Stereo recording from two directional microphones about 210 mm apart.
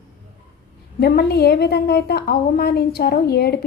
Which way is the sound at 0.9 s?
50° left (ahead or behind).